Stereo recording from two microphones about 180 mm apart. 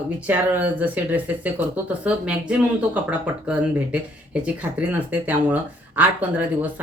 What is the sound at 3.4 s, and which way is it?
Speech, 5° right (ahead or behind).